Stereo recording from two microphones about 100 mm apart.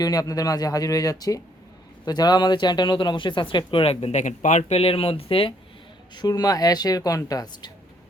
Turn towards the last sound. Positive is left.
turn(degrees=40)  # may be behind; listen again after turning